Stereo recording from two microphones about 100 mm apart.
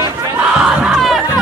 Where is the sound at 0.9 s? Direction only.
Centre (ahead or behind).